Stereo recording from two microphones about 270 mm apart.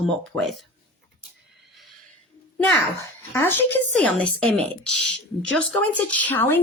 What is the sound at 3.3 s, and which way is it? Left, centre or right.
A woman's voice, centre.